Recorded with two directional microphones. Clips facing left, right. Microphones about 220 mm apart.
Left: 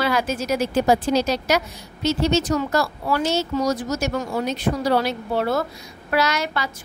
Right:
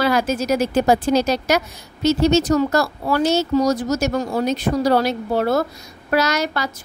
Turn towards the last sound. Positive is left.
turn(degrees=-40)  # may be behind; listen again after turning